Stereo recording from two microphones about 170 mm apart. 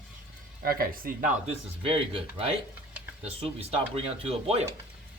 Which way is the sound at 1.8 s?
30° right (ahead or behind).